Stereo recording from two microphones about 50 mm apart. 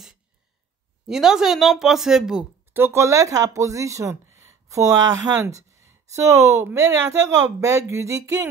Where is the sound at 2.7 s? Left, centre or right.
Right.